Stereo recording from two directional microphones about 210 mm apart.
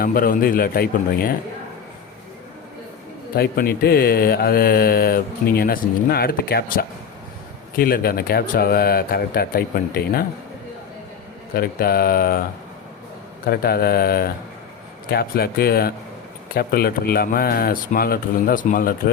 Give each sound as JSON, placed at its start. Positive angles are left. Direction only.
{"t": 0.0, "sound": "speech", "side_deg": 45}
{"t": 3.3, "sound": "speech", "side_deg": 45}
{"t": 11.5, "sound": "speech", "side_deg": 45}
{"t": 13.5, "sound": "speech", "side_deg": 45}